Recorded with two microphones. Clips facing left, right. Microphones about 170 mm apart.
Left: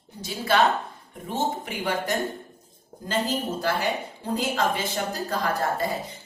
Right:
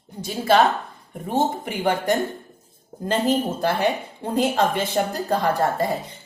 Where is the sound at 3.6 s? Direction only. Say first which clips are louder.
Right 4 dB; 55° right (ahead or behind).